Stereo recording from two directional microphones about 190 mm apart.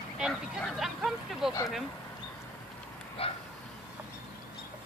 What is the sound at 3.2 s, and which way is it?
Speech, 30° left (ahead or behind).